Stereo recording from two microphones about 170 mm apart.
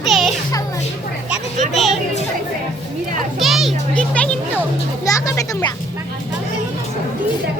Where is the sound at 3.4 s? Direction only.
Centre (ahead or behind).